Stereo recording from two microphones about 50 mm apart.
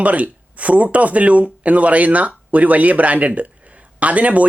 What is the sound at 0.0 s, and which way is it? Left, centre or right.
Speech, right.